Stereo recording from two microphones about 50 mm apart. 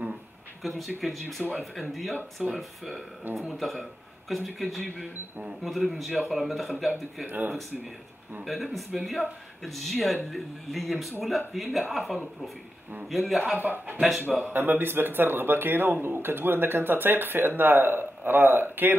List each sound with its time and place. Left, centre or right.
0.6 s speech: centre
7.2 s a man's voice: right
8.7 s speech: centre
13.6 s a man's voice: right